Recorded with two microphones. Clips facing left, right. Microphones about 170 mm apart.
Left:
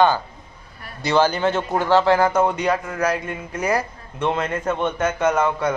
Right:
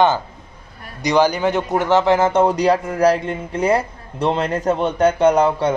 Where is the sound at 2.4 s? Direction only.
35° right (ahead or behind).